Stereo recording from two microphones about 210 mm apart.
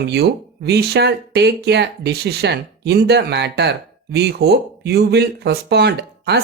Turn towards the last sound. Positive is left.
turn(degrees=-50)  # may be behind; listen again after turning